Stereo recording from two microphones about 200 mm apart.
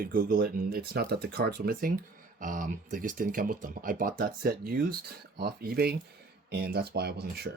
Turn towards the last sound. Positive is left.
turn(degrees=-50)  # may be behind; listen again after turning